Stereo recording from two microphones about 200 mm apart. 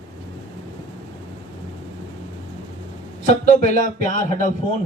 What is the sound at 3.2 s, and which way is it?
A man's voice, 35° left (ahead or behind).